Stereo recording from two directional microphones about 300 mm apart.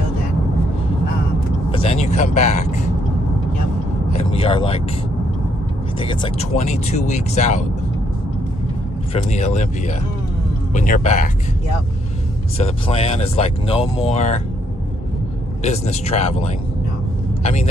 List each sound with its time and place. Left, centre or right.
1.8 s speech: left
4.2 s speech: centre
5.9 s speech: centre
9.1 s speech: left
12.5 s speech: left
15.6 s speech: left